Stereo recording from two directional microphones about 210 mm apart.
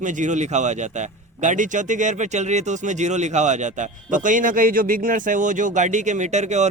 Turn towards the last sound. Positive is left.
turn(degrees=-35)  # may be behind; listen again after turning